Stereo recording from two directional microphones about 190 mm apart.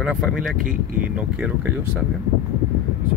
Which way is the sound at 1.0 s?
5° right (ahead or behind).